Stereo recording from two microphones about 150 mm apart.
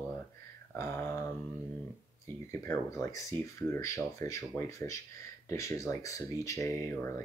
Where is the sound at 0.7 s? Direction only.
20° left (ahead or behind).